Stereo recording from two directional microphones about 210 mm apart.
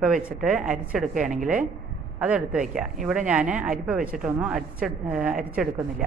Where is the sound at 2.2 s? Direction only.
5° right (ahead or behind).